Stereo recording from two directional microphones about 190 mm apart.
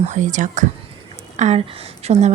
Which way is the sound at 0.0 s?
40° right (ahead or behind).